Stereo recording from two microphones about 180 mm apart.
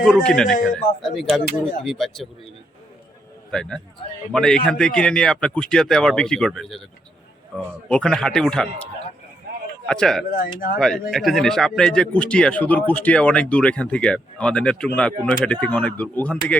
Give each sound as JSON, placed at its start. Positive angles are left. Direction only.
{"t": 0.0, "sound": "a man's voice", "side_deg": 5}
{"t": 3.5, "sound": "a man's voice", "side_deg": 5}
{"t": 9.8, "sound": "speech", "side_deg": 5}
{"t": 10.2, "sound": "speech", "side_deg": 50}
{"t": 10.8, "sound": "a man's voice", "side_deg": 5}